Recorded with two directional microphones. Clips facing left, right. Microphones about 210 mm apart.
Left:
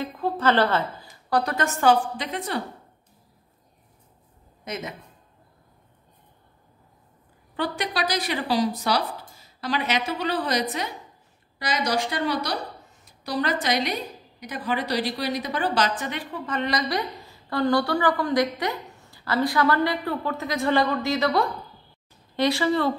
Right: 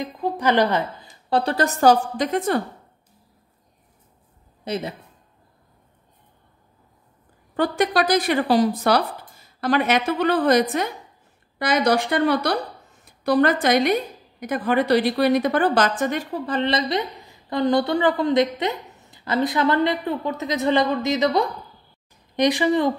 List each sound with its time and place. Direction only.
0.0 s a woman's voice: 15° right (ahead or behind)
1.0 s a woman's voice: 30° right (ahead or behind); by 2.6 s 45° right (ahead or behind)
4.6 s a woman's voice: 30° right (ahead or behind)
7.5 s a woman's voice: 50° right (ahead or behind); by 22.9 s 15° right (ahead or behind)